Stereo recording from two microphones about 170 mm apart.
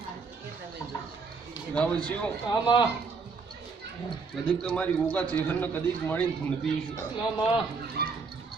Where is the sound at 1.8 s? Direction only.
5° left (ahead or behind).